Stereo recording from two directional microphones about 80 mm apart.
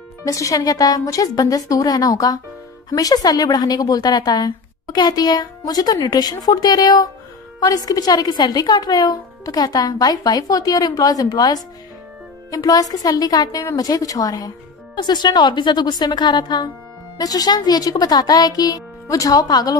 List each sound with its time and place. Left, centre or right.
0.2 s a woman's voice: left
15.0 s speech: left
17.2 s a woman's voice: left